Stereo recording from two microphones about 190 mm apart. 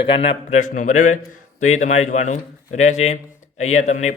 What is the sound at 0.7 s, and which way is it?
Speech, 40° left (ahead or behind).